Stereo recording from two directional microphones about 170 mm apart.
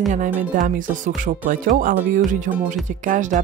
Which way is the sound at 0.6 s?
50° right (ahead or behind).